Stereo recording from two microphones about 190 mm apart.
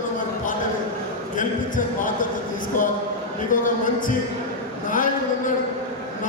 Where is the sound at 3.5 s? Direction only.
45° left (ahead or behind).